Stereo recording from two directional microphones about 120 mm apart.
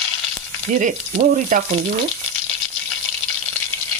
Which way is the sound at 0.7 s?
90° right.